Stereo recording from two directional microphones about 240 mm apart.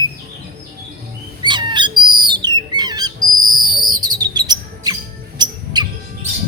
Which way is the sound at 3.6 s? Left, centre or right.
Centre.